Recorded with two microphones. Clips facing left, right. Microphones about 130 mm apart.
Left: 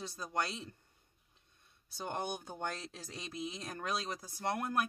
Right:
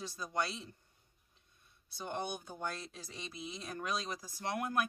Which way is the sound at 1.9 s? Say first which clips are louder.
Left 1 dB; 40° left (ahead or behind).